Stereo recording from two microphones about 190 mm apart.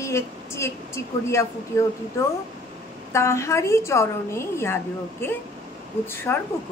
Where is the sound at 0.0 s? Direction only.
15° left (ahead or behind).